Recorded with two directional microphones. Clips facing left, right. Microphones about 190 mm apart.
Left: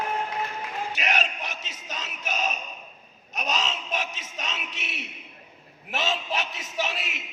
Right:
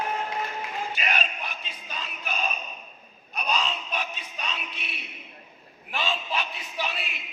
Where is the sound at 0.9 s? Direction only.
80° left.